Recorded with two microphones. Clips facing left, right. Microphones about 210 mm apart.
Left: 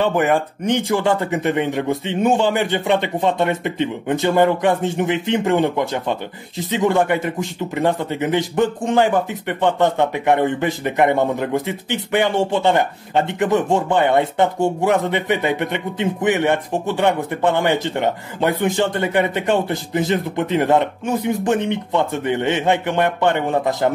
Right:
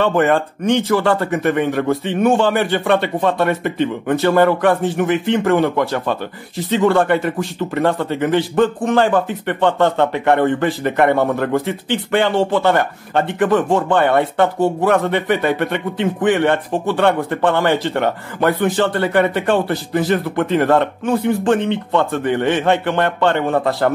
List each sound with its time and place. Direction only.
0.0 s speech: 15° left (ahead or behind)